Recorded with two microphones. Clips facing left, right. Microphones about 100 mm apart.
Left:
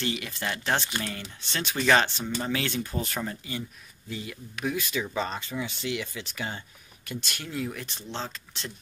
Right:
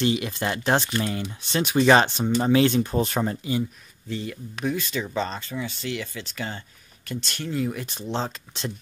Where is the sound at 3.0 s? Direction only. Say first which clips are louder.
Right 8 dB; 35° right (ahead or behind).